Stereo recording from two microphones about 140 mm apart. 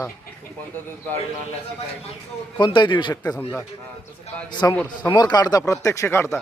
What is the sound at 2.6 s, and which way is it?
Speech, 35° left (ahead or behind).